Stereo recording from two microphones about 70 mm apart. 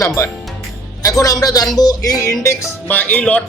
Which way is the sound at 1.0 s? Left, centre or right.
Left.